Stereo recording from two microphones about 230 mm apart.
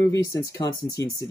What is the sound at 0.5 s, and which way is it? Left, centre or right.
Speech, centre.